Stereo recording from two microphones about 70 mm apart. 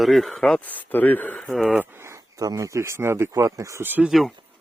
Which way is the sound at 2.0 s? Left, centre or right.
Right.